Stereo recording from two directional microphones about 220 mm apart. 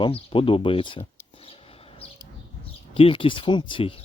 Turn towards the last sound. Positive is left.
turn(degrees=25)  # may be behind; listen again after turning